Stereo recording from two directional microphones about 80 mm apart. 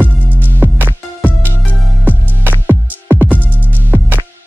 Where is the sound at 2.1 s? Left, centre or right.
Right.